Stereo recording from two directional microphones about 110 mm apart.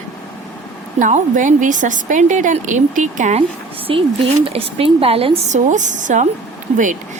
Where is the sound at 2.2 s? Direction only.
90° right.